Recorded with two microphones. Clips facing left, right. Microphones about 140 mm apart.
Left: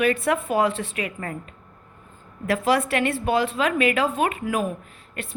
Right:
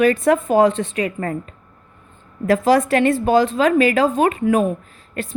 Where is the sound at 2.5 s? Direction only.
35° right (ahead or behind).